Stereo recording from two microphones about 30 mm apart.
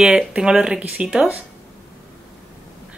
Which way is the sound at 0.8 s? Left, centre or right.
Right.